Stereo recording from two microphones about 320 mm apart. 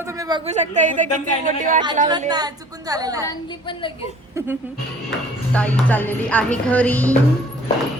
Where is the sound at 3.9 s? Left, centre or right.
Centre.